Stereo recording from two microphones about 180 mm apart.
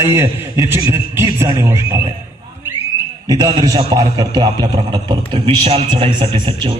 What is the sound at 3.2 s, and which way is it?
A man's voice, 20° right (ahead or behind).